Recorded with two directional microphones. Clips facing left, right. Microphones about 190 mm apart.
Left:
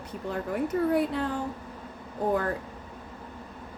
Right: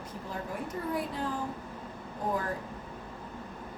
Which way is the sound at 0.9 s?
65° left (ahead or behind).